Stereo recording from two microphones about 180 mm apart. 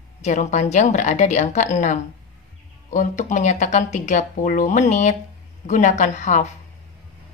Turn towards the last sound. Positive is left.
turn(degrees=40)  # may be behind; listen again after turning